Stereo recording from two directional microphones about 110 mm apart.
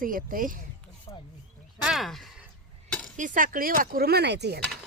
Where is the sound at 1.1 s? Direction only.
40° left (ahead or behind).